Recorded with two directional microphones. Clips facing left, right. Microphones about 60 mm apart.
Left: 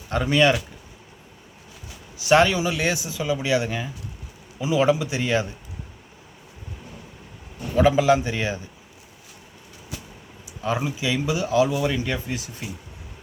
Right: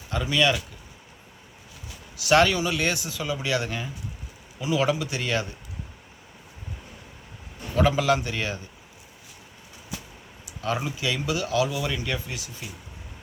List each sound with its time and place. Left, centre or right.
0.1 s speech: left
2.2 s speech: centre
7.8 s speech: centre
10.6 s speech: centre